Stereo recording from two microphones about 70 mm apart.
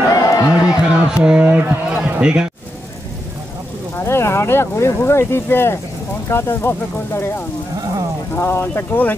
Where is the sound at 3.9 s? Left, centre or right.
Left.